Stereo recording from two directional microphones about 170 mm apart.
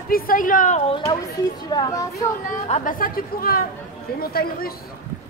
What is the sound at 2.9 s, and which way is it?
A woman's voice, 55° left (ahead or behind).